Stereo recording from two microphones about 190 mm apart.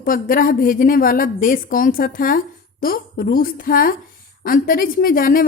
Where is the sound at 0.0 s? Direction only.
45° left (ahead or behind).